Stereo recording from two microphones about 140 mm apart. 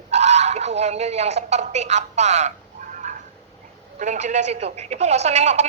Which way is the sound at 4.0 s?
60° right (ahead or behind).